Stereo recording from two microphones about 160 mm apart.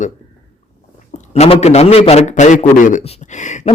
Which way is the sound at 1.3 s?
40° left (ahead or behind).